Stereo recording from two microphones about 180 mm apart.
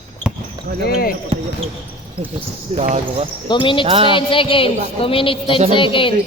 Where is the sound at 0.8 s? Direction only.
55° left (ahead or behind).